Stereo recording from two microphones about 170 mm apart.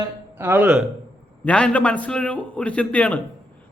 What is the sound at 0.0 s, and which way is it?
Speech, 15° right (ahead or behind).